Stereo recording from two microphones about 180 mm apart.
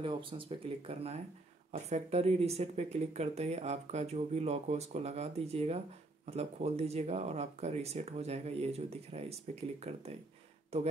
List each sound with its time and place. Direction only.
0.0 s speech: 30° right (ahead or behind)